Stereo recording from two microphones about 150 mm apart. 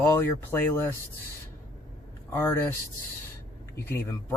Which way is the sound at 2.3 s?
15° left (ahead or behind).